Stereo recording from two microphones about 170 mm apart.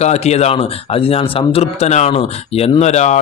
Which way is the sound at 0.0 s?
40° left (ahead or behind).